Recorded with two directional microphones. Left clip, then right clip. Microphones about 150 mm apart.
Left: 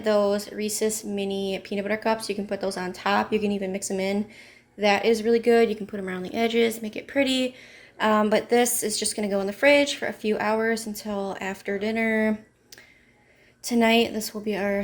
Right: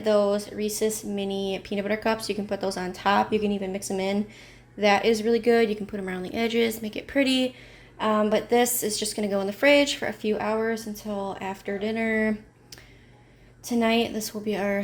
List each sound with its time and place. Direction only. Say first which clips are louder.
0.0 s speech: even; 10° left (ahead or behind)
7.9 s a woman's voice: left 2 dB; 25° left (ahead or behind)
13.7 s speech: left 3 dB; 25° left (ahead or behind)